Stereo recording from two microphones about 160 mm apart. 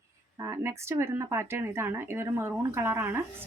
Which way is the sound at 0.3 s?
20° right (ahead or behind).